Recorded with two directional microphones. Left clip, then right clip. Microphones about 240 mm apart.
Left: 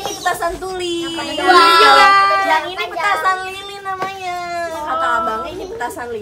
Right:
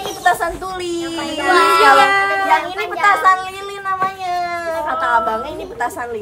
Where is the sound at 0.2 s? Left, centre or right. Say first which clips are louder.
Right 4 dB; centre.